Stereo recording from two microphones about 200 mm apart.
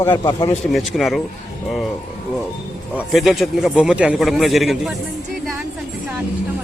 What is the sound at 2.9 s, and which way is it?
A man's voice, centre (ahead or behind).